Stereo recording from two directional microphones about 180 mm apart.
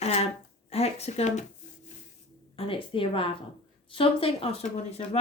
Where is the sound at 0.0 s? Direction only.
35° left (ahead or behind).